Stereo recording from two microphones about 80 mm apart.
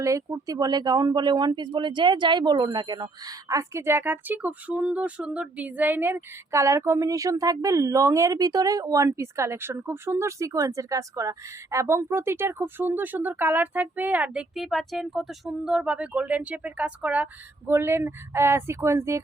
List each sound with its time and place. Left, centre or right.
0.0 s speech: right
3.5 s speech: right
6.6 s a woman's voice: right; by 14.4 s centre
14.5 s speech: centre
17.7 s a woman's voice: right